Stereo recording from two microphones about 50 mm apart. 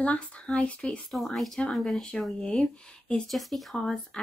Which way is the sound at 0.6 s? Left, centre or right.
Left.